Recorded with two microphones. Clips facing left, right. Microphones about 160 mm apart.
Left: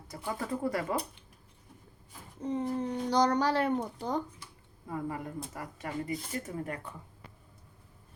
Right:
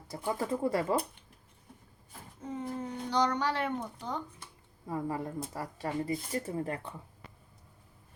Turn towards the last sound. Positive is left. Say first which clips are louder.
# right 3 dB
turn(degrees=-30)  # may be behind; listen again after turning